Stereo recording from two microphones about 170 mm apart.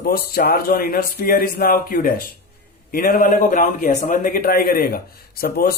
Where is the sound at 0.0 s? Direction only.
65° left (ahead or behind).